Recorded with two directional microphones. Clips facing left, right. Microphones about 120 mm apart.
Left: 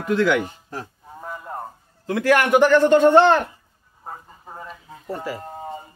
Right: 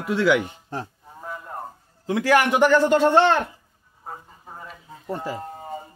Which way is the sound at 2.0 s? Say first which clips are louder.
Left 1 dB; 15° right (ahead or behind).